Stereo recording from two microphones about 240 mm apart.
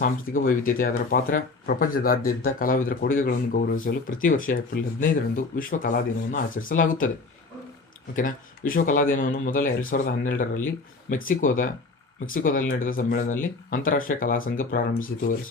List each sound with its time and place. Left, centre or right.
0.0 s speech: left
8.1 s speech: left